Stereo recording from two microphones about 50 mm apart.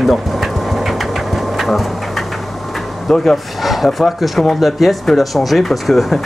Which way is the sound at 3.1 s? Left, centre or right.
Centre.